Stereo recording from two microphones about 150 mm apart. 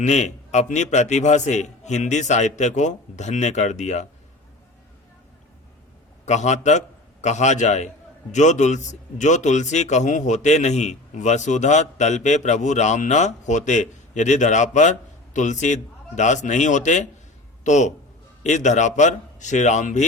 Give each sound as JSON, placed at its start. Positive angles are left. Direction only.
{"t": 0.0, "sound": "a man's voice", "side_deg": 50}
{"t": 6.2, "sound": "a man's voice", "side_deg": 50}